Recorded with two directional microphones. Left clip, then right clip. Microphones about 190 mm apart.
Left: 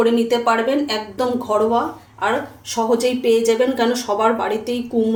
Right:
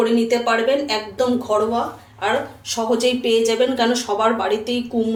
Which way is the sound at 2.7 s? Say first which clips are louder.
Left 1 dB; 45° left (ahead or behind).